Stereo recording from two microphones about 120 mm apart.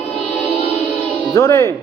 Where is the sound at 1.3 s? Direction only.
20° left (ahead or behind).